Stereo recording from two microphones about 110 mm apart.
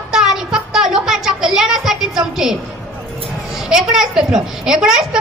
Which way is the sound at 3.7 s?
5° right (ahead or behind).